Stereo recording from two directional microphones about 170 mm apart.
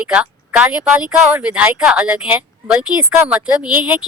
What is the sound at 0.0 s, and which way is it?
Speech, 10° right (ahead or behind).